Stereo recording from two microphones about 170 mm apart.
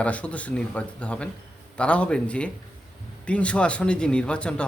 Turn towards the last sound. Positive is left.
turn(degrees=5)  # may be behind; listen again after turning